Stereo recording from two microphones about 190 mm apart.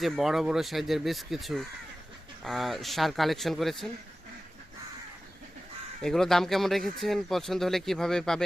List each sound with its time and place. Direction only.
0.0 s speech: centre (ahead or behind)
6.0 s speech: 5° left (ahead or behind)